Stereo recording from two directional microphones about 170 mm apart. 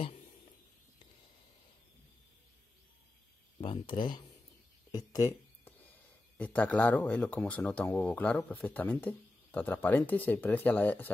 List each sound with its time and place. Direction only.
3.6 s speech: 30° left (ahead or behind); by 11.1 s 10° left (ahead or behind)